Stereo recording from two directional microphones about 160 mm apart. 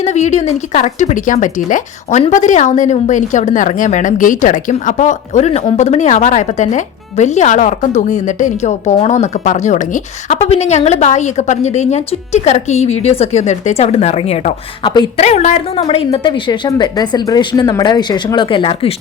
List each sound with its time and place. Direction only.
0.0 s a woman's voice: 45° left (ahead or behind)